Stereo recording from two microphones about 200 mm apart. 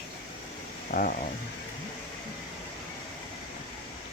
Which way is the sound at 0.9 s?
40° left (ahead or behind).